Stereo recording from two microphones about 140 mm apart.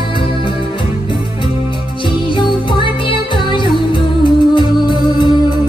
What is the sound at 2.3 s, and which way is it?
Music, 35° left (ahead or behind).